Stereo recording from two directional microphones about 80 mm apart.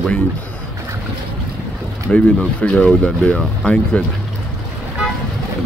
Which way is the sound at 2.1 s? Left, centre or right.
Centre.